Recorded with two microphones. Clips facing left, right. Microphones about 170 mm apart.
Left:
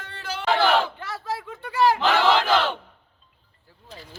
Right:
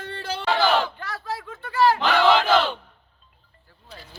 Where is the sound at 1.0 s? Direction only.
20° left (ahead or behind).